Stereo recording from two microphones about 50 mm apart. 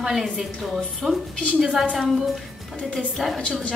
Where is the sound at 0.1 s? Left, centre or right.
Centre.